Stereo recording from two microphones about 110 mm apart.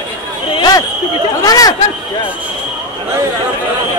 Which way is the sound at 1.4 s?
35° left (ahead or behind).